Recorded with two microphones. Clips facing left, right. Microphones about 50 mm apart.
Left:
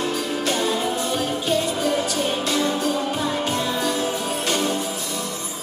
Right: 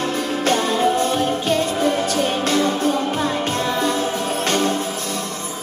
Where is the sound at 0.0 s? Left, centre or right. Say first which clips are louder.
Right 3 dB; right.